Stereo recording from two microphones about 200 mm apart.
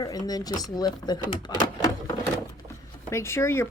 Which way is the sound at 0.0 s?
20° left (ahead or behind).